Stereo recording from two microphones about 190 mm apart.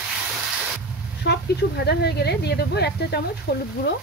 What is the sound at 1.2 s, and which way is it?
Speech, 60° left (ahead or behind).